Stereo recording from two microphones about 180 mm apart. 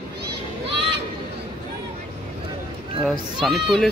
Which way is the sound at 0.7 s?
70° right (ahead or behind).